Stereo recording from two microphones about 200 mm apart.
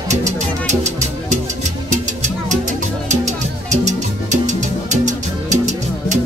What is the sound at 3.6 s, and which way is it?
Music, 35° right (ahead or behind).